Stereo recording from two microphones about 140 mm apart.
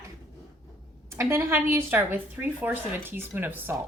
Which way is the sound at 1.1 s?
20° right (ahead or behind).